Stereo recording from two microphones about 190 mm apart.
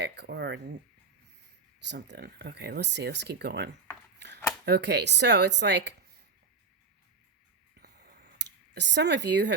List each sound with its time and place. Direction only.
0.0 s a sound: 60° right (ahead or behind)
1.9 s speech: 65° right (ahead or behind)
8.4 s speech: 65° right (ahead or behind)